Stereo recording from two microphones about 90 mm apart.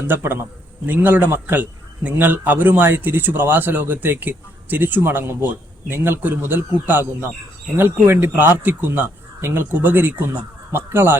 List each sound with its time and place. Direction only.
0.1 s a man's voice: 25° right (ahead or behind)
7.8 s a man's voice: 25° right (ahead or behind)